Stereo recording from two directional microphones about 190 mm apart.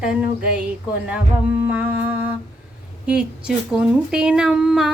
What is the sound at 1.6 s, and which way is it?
Humming, 10° right (ahead or behind).